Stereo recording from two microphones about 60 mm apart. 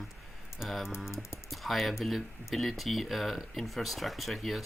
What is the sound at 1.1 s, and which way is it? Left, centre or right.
Speech, left.